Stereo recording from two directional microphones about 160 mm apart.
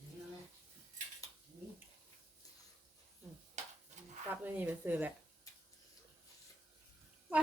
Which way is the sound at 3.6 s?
45° right (ahead or behind).